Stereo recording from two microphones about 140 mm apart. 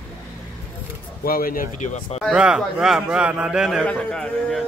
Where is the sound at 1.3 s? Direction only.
90° left; by 2.2 s 60° left (ahead or behind).